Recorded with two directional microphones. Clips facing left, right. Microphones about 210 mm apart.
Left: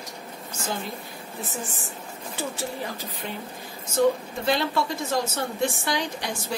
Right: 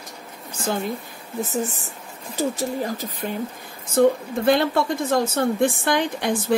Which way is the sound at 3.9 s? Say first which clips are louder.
Right 4 dB; 55° right (ahead or behind).